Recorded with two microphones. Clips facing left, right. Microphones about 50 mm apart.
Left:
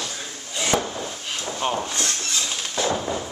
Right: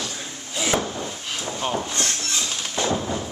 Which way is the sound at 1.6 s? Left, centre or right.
Centre.